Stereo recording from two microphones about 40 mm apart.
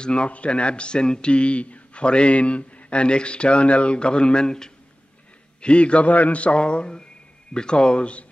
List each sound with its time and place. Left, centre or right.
0.0 s speech: left
5.6 s speech: left